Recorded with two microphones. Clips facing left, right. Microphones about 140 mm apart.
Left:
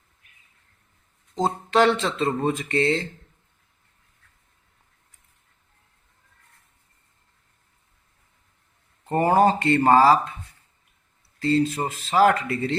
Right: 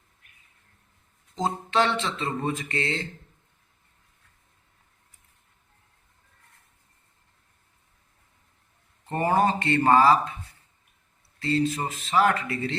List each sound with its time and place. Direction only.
1.4 s speech: 35° left (ahead or behind)
9.0 s speech: 30° left (ahead or behind)
11.3 s speech: 35° left (ahead or behind)